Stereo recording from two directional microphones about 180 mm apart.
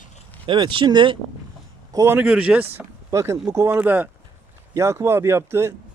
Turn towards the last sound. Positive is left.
turn(degrees=-15)  # may be behind; listen again after turning